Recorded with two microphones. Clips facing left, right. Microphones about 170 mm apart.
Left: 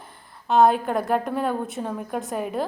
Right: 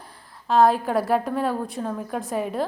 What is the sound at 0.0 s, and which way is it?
A woman's voice, centre (ahead or behind).